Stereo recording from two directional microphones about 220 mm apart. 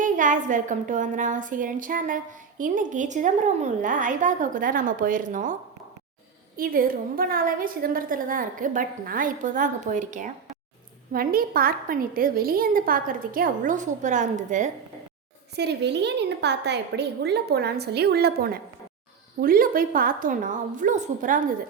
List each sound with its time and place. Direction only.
0.0 s a woman's voice: 35° right (ahead or behind)
6.6 s a woman's voice: 40° right (ahead or behind)
15.5 s a woman's voice: 50° right (ahead or behind)